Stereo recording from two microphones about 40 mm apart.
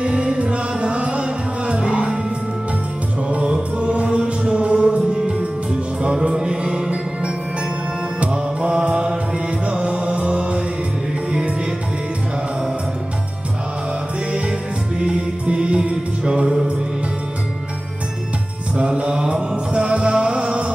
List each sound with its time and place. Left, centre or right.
0.0 s music: right
3.3 s music: right
8.2 s music: right
15.0 s music: right
18.8 s music: right